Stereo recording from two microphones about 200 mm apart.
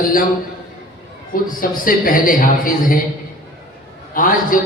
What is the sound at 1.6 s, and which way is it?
A man's voice, 45° left (ahead or behind).